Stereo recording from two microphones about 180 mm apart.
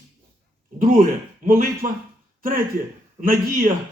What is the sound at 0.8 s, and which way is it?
A man's voice, 50° right (ahead or behind).